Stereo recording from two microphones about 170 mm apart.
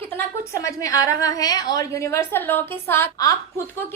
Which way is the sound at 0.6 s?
20° left (ahead or behind).